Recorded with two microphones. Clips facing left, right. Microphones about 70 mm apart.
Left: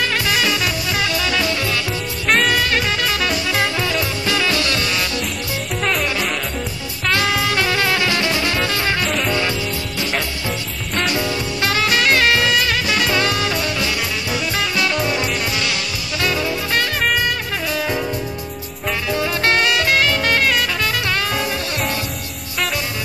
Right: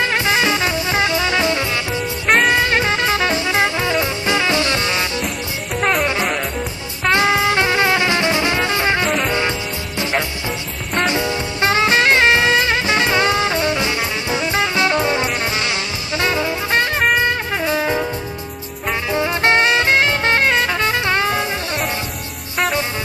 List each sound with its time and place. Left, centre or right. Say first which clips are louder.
0.0 s music: right 2 dB; right
5.8 s music: right 4 dB; centre
7.1 s music: right 4 dB; right
11.1 s music: right 1 dB; right